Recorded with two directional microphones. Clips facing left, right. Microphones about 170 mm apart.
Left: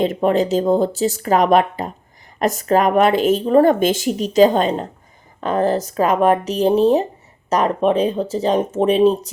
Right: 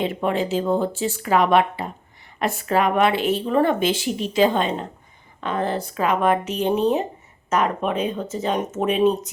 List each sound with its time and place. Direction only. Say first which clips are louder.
0.0 s speech: left 6 dB; 40° left (ahead or behind)